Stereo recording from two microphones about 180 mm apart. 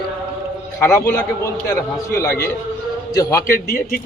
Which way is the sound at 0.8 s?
15° left (ahead or behind).